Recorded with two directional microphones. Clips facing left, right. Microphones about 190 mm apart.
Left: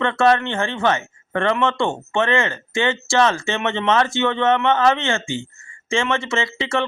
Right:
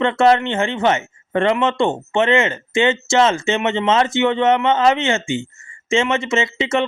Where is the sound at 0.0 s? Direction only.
20° right (ahead or behind).